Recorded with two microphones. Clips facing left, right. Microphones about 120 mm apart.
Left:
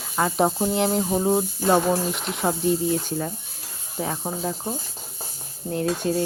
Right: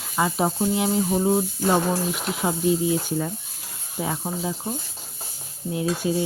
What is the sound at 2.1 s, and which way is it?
A woman's voice, 5° right (ahead or behind).